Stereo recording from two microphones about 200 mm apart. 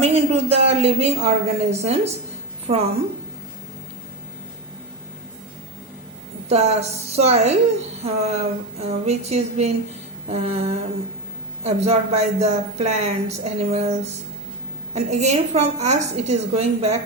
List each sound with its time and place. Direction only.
0.0 s speech: 30° right (ahead or behind)
6.5 s speech: 35° right (ahead or behind)